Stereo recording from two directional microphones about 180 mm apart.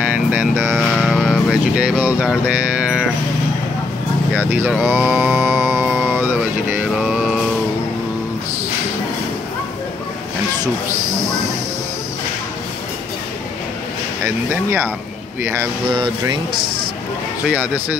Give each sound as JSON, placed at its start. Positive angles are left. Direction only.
{"t": 0.0, "sound": "vehicle", "side_deg": -10}
{"t": 4.3, "sound": "music", "side_deg": -5}
{"t": 14.2, "sound": "speech", "side_deg": -10}
{"t": 15.9, "sound": "speech", "side_deg": -25}